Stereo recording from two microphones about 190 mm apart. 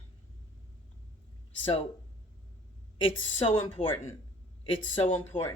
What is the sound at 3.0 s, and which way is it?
Speech, 30° left (ahead or behind).